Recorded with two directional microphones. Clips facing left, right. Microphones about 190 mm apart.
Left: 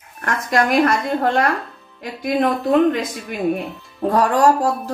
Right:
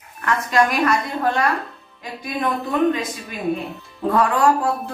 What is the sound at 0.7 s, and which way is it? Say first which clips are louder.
Speech: left 4 dB; 55° left (ahead or behind).